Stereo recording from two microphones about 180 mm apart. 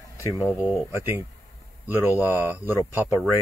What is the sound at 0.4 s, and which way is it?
A man's voice, 5° right (ahead or behind).